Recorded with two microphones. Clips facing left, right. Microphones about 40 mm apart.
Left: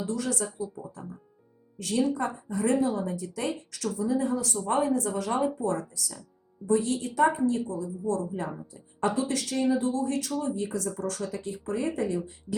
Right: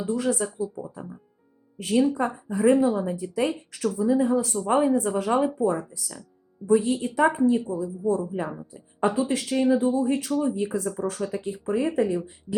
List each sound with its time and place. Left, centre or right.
0.2 s speech: right
0.4 s speech: centre
0.8 s speech: right